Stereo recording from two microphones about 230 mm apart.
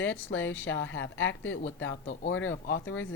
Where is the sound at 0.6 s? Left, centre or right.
Left.